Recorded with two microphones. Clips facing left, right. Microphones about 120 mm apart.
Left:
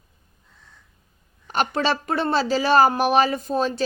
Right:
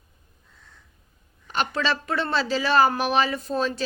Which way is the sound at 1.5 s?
40° left (ahead or behind).